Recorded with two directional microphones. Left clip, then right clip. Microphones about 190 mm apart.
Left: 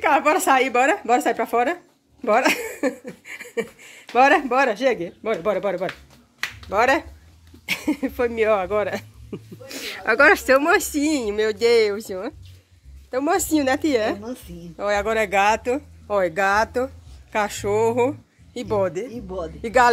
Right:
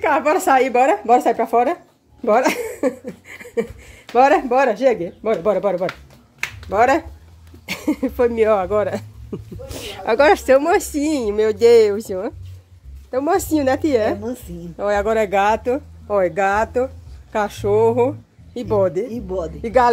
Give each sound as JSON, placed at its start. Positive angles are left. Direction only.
{"t": 0.0, "sound": "speech", "side_deg": -5}
{"t": 14.2, "sound": "a woman's voice", "side_deg": -60}
{"t": 14.8, "sound": "speech", "side_deg": -15}
{"t": 19.6, "sound": "speech", "side_deg": 0}